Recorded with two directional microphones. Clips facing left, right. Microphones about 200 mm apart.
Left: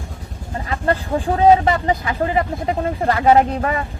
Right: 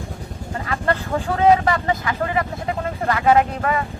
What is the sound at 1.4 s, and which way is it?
Speech, 25° left (ahead or behind).